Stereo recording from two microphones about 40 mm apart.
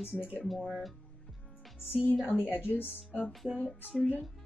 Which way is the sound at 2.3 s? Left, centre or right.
Left.